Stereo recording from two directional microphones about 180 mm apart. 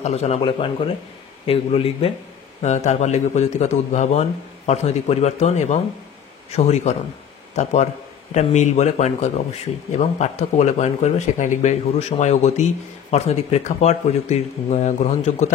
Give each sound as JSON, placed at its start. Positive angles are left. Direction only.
{"t": 0.0, "sound": "speech", "side_deg": 35}